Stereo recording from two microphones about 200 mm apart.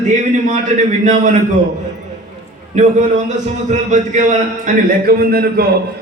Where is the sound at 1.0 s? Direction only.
35° right (ahead or behind).